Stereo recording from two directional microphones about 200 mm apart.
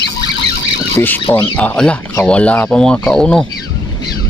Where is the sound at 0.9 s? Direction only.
10° left (ahead or behind).